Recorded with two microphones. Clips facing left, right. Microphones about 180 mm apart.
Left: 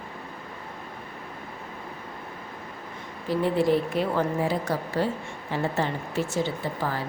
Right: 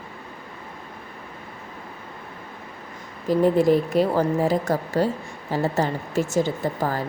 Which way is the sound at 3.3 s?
45° right (ahead or behind).